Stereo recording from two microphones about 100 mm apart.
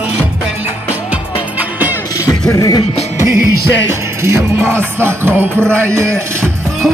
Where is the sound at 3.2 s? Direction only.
30° right (ahead or behind).